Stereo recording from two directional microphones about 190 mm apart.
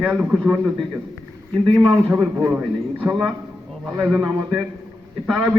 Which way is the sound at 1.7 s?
5° right (ahead or behind).